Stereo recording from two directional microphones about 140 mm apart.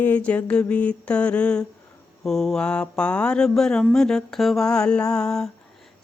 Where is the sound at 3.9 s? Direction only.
5° left (ahead or behind).